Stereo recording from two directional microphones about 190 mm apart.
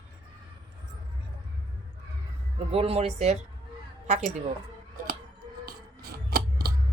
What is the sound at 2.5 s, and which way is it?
Speech, 30° right (ahead or behind).